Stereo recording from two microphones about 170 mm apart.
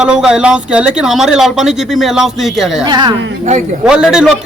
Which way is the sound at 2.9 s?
25° right (ahead or behind).